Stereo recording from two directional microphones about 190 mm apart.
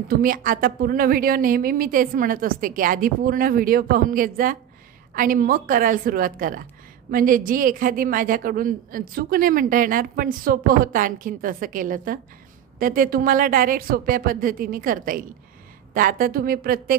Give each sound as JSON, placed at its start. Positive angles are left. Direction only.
{"t": 0.1, "sound": "a woman's voice", "side_deg": -50}